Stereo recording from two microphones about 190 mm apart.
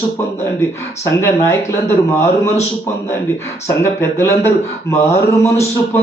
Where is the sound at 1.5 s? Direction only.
15° left (ahead or behind).